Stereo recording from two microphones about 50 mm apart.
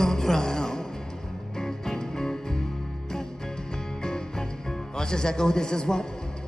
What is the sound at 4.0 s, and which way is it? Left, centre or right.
Music, centre.